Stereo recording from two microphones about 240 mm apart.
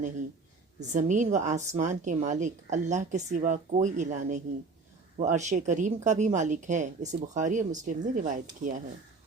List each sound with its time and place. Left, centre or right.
0.8 s a woman's voice: right